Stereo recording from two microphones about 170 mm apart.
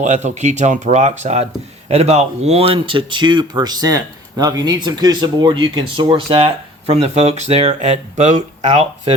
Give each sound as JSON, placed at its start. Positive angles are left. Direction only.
{"t": 0.0, "sound": "speech", "side_deg": -45}